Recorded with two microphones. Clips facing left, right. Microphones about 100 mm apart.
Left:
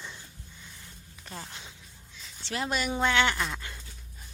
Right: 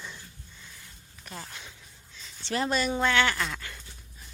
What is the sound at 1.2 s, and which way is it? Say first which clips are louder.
Speech: even; 25° left (ahead or behind).